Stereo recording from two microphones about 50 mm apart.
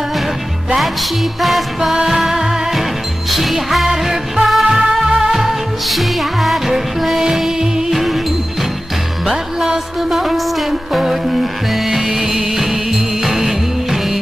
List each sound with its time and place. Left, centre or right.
1.4 s music: centre
9.2 s music: centre